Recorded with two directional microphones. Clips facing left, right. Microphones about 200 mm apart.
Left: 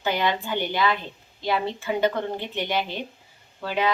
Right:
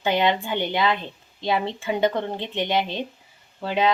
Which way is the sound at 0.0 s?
20° right (ahead or behind).